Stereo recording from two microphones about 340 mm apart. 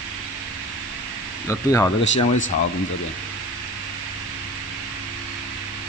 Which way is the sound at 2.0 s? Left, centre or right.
Left.